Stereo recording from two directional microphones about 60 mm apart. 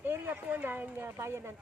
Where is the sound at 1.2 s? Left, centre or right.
Right.